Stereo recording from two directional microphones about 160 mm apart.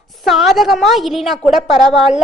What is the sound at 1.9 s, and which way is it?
Speech, centre (ahead or behind).